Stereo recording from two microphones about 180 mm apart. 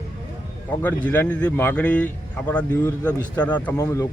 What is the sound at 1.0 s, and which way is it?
A man's voice, 10° left (ahead or behind).